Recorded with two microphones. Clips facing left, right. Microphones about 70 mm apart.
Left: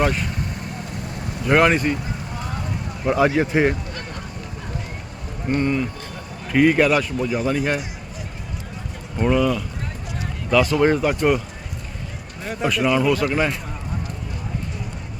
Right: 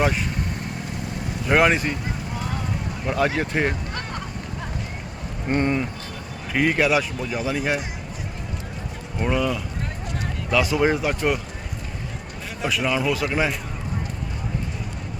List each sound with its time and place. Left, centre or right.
0.0 s speech: centre
1.5 s speech: centre
3.1 s speech: centre
5.5 s speech: right
6.5 s speech: centre
9.1 s speech: centre
12.6 s speech: centre